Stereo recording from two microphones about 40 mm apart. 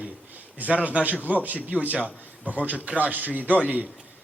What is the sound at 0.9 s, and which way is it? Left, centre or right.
Speech, right.